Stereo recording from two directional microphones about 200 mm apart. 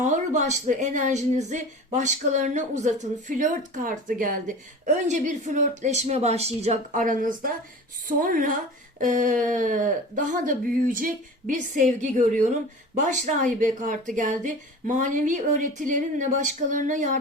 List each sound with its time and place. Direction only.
0.0 s a woman's voice: 35° right (ahead or behind)